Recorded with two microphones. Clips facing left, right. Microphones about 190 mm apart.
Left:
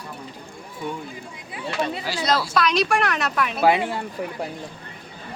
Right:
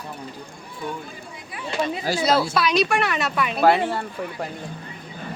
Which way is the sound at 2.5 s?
5° right (ahead or behind).